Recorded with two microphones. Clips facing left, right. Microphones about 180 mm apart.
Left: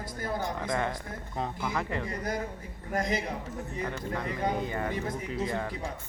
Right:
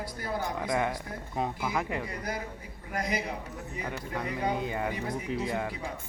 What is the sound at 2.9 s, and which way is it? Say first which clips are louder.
Speech: left 2 dB; 45° left (ahead or behind).